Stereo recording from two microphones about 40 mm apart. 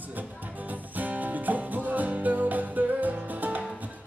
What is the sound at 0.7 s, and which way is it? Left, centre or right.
Music, right.